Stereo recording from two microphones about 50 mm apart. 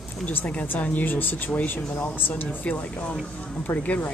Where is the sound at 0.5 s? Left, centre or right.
Left.